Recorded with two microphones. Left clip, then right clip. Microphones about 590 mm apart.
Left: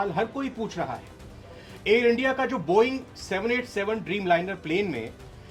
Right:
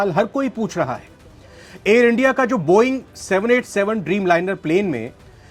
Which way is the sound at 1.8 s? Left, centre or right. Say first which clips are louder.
Right 7 dB; right.